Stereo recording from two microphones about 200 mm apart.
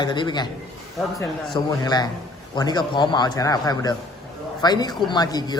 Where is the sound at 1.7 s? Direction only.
20° left (ahead or behind).